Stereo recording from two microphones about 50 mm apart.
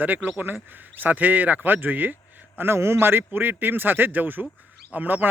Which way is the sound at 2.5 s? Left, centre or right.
Right.